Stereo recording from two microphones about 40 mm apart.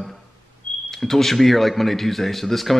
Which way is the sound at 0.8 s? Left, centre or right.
Centre.